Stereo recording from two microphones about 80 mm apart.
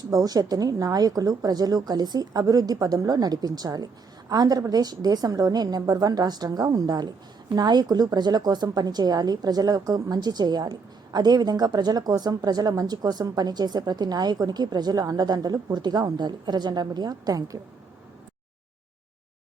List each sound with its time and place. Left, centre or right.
0.0 s a woman's voice: right